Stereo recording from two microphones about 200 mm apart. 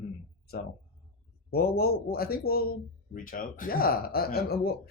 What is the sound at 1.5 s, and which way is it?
Speech, 50° left (ahead or behind).